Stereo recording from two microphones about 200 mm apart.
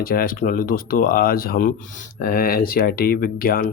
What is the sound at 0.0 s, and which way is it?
Speech, 50° left (ahead or behind).